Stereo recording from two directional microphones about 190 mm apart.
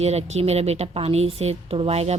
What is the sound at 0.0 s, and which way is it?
Speech, 35° right (ahead or behind).